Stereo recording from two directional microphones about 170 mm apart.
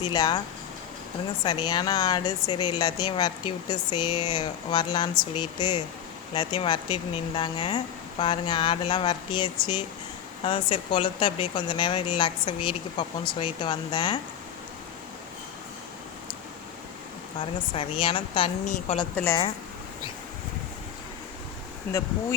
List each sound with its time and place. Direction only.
0.1 s speech: 25° left (ahead or behind)
1.5 s speech: 25° left (ahead or behind)
17.7 s speech: 30° left (ahead or behind)
18.6 s a woman's voice: 45° left (ahead or behind)
19.1 s a woman's voice: 10° left (ahead or behind)
21.9 s a woman's voice: 10° left (ahead or behind)